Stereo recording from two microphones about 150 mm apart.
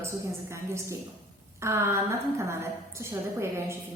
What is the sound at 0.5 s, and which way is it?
A woman's voice, 20° right (ahead or behind).